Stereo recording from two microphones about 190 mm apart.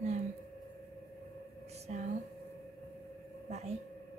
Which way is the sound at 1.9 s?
35° right (ahead or behind).